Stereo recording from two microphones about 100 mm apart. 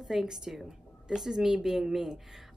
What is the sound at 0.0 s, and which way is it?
Speech, 5° right (ahead or behind).